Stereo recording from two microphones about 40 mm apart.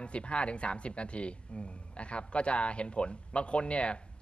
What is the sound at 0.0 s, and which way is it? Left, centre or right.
A man's voice, left.